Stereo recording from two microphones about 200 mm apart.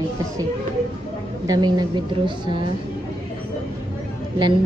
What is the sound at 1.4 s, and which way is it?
Speech, 20° right (ahead or behind).